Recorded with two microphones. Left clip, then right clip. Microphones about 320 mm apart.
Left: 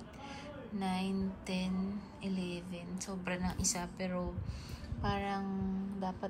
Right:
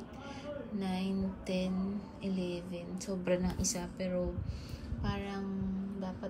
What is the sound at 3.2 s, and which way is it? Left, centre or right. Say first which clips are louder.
A woman's voice: right 5 dB; centre.